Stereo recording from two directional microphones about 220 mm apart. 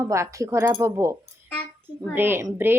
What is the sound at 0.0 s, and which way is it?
A woman's voice, 15° right (ahead or behind).